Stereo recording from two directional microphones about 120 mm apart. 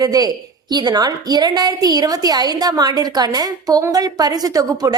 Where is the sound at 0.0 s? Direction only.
30° right (ahead or behind).